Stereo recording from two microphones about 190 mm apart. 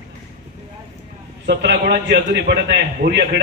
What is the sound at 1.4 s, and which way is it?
A man's voice, 65° right (ahead or behind).